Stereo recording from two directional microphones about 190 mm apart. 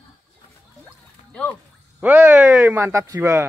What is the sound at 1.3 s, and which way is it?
Music, 5° left (ahead or behind).